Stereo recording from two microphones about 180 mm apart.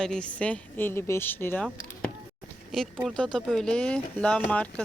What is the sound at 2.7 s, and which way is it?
A woman's voice, centre (ahead or behind).